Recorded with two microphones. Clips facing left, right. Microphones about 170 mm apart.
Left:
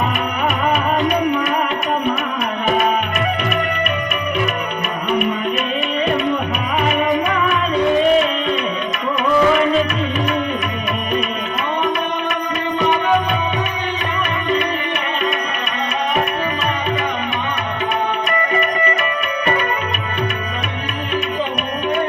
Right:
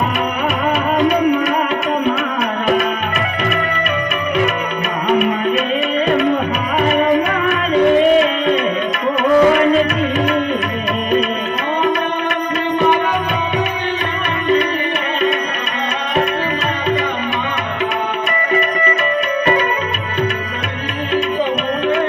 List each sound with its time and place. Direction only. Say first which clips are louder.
6.8 s music: right 4 dB; 40° right (ahead or behind)
9.2 s music: right 3 dB; 45° right (ahead or behind)